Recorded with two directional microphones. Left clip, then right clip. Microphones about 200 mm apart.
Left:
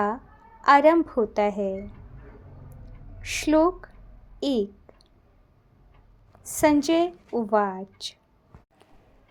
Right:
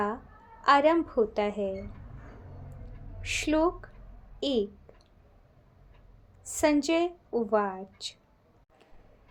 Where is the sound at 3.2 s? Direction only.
35° left (ahead or behind).